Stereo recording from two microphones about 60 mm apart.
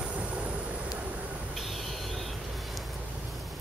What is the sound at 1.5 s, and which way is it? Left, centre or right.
Owl, centre.